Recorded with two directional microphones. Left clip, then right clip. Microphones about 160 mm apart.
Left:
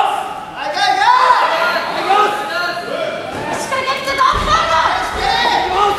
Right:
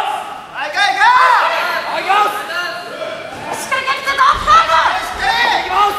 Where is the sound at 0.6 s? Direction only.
15° right (ahead or behind).